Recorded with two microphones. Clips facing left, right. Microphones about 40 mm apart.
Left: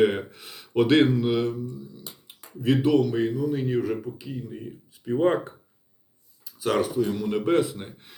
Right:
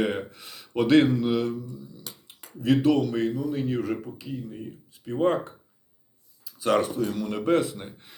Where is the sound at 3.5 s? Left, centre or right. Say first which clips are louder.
Left 1 dB; centre.